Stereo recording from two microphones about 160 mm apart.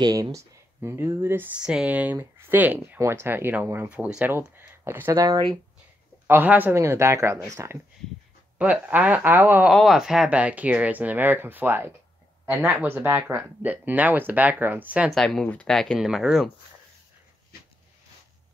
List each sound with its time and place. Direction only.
0.0 s speech: 20° right (ahead or behind)
9.7 s speech: centre (ahead or behind)
15.1 s speech: 5° left (ahead or behind)